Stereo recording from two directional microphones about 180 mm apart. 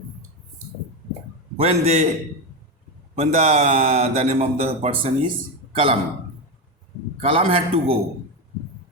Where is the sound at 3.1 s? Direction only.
35° right (ahead or behind).